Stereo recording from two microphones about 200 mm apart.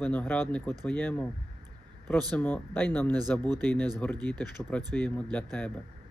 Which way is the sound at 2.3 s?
10° left (ahead or behind).